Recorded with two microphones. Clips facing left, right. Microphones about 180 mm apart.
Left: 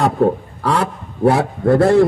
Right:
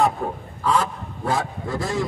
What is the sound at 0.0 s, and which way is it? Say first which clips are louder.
A man's voice: left 7 dB; 70° left (ahead or behind).